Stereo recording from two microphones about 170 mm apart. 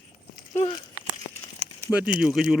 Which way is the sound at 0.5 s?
30° left (ahead or behind).